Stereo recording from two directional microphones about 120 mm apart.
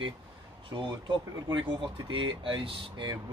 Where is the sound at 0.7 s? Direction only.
40° right (ahead or behind).